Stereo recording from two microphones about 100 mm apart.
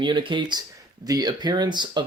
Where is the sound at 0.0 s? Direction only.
55° right (ahead or behind).